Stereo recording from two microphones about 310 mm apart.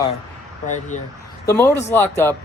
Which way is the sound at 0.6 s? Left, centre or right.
Left.